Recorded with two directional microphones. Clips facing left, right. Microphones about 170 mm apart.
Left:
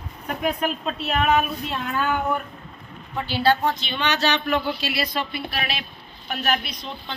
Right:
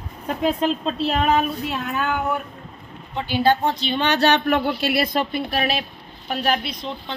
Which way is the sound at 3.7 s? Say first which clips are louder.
Right 4 dB; 40° right (ahead or behind).